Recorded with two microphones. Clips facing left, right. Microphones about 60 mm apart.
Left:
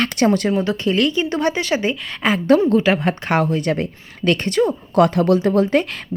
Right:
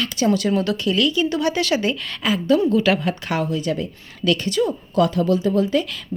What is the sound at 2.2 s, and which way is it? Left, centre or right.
A woman's voice, left.